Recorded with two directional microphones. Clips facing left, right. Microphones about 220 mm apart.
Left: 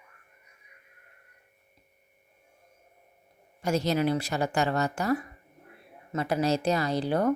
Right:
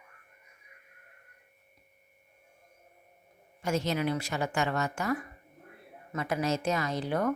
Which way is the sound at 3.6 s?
35° left (ahead or behind).